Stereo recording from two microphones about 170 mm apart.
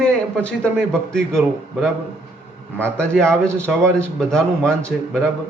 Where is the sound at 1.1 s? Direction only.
5° left (ahead or behind).